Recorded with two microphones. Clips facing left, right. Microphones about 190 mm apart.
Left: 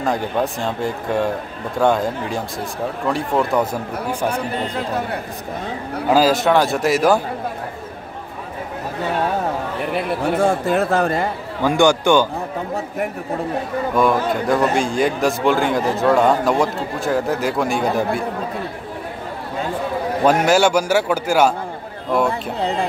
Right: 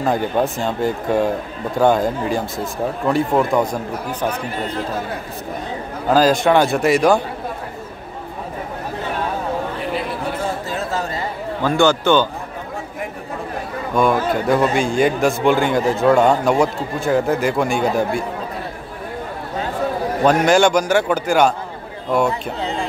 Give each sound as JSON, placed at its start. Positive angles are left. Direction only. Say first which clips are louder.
{"t": 0.0, "sound": "a man's voice", "louder": "right 2 dB", "side_deg": 0}
{"t": 6.0, "sound": "a man's voice", "louder": "right 1 dB", "side_deg": 5}
{"t": 10.6, "sound": "speech", "louder": "left 6 dB", "side_deg": 55}
{"t": 11.6, "sound": "a man's voice", "louder": "left 1 dB", "side_deg": 15}
{"t": 13.9, "sound": "a man's voice", "louder": "right 1 dB", "side_deg": 0}
{"t": 20.2, "sound": "a man's voice", "louder": "right 1 dB", "side_deg": 5}